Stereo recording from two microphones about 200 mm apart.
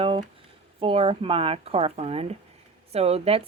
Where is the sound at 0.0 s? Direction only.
30° right (ahead or behind).